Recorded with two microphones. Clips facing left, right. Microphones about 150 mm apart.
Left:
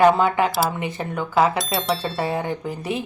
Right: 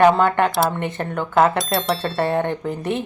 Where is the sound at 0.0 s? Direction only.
5° left (ahead or behind).